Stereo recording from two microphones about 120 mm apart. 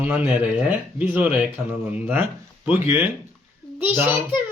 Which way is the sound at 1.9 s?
15° right (ahead or behind).